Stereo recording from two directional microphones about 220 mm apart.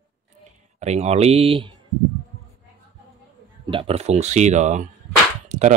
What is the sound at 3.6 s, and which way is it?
Speech, 25° right (ahead or behind).